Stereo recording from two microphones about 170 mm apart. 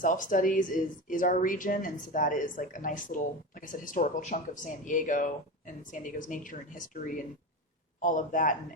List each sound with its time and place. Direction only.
0.0 s speech: 50° left (ahead or behind)